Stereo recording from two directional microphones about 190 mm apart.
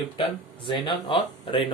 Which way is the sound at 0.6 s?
25° left (ahead or behind).